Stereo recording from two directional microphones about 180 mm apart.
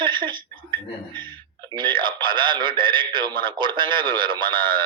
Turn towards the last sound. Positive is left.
turn(degrees=-25)  # may be behind; listen again after turning